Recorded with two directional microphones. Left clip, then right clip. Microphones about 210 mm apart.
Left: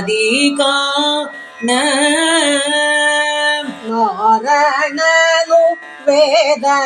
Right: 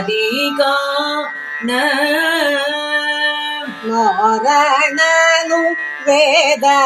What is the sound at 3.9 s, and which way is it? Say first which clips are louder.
Male singing: even; 15° right (ahead or behind).